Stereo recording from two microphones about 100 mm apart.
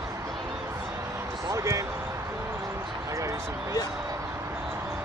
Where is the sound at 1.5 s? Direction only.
30° right (ahead or behind).